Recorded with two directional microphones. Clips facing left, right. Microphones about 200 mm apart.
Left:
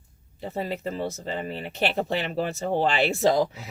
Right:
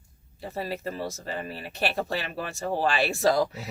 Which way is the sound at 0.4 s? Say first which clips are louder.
Left 2 dB; 20° left (ahead or behind).